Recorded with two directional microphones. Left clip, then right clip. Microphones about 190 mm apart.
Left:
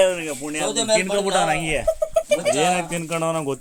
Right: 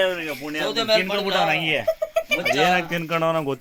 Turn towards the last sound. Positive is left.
turn(degrees=5)  # may be behind; listen again after turning